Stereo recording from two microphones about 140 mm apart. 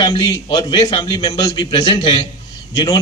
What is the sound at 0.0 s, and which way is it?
A man's voice, 30° left (ahead or behind).